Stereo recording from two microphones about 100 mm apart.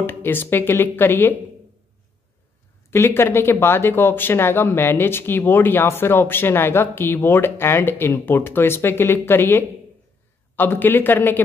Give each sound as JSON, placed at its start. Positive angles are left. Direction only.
{"t": 0.0, "sound": "speech", "side_deg": 20}
{"t": 2.9, "sound": "speech", "side_deg": 25}